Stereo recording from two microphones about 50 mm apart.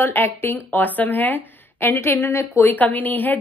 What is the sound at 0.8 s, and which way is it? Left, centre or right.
Speech, left.